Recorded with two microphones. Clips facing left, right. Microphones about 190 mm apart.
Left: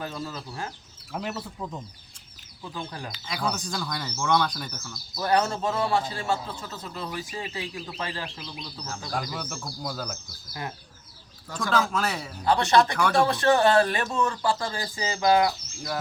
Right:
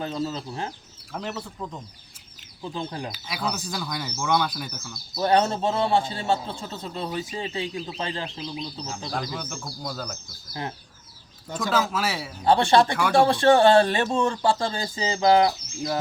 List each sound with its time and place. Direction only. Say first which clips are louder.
0.0 s a man's voice: right 5 dB; 20° right (ahead or behind)
1.1 s speech: even; 5° left (ahead or behind)
2.6 s a man's voice: right 5 dB; 25° right (ahead or behind)
3.1 s speech: even; 5° right (ahead or behind)
5.1 s a man's voice: right 3 dB; 25° right (ahead or behind)
9.1 s speech: even; centre (ahead or behind)
11.4 s a man's voice: right 3 dB; 20° right (ahead or behind)
11.7 s speech: even; 5° right (ahead or behind)
12.5 s a man's voice: right 3 dB; 30° right (ahead or behind)